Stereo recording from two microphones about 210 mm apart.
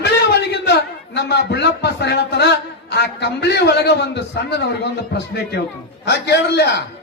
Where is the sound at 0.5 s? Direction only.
55° left (ahead or behind).